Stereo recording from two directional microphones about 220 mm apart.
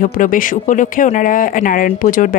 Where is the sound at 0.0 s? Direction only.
40° left (ahead or behind).